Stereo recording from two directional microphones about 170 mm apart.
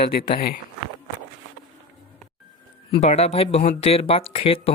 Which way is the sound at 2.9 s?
40° left (ahead or behind).